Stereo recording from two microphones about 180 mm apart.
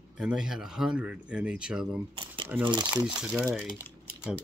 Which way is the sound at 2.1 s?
30° right (ahead or behind).